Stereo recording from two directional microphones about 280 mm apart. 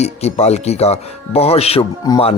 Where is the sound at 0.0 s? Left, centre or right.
Left.